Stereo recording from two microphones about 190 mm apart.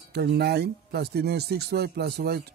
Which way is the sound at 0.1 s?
60° right (ahead or behind).